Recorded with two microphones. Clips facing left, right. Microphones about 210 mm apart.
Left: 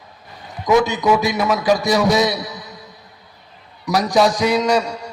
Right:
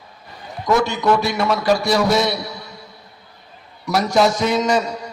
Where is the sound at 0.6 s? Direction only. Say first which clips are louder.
Left 2 dB; 15° left (ahead or behind).